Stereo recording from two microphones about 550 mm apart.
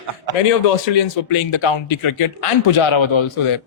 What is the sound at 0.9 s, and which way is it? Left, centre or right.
Speech, left.